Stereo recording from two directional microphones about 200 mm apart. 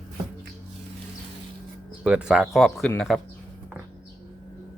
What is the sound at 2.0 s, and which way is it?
Speech, 5° right (ahead or behind).